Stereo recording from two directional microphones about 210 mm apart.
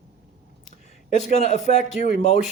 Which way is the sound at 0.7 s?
35° left (ahead or behind).